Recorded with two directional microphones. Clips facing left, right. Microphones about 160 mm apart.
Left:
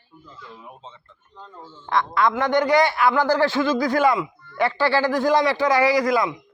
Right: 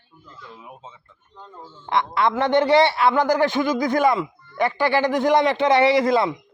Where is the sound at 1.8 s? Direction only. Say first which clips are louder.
Even; 25° right (ahead or behind).